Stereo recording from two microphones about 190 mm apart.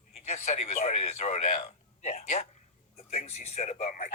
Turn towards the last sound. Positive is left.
turn(degrees=35)  # may be behind; listen again after turning